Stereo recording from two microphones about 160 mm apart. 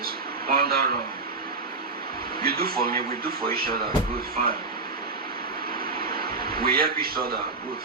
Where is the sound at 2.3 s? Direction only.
70° right (ahead or behind).